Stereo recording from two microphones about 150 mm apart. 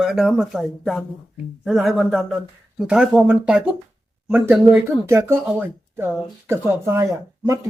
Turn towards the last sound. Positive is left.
turn(degrees=-20)  # may be behind; listen again after turning